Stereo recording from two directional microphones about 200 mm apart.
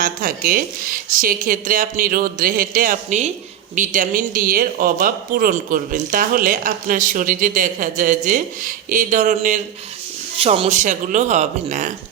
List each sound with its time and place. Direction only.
0.0 s speech: 40° right (ahead or behind)
10.3 s speech: 30° right (ahead or behind)